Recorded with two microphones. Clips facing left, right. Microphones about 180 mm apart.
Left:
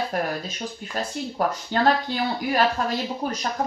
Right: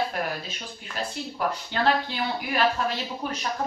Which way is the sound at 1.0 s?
40° left (ahead or behind).